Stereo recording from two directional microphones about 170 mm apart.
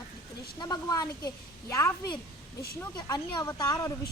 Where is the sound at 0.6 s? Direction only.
20° left (ahead or behind).